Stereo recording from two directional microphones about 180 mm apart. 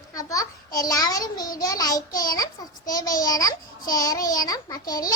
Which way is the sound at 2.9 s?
20° left (ahead or behind).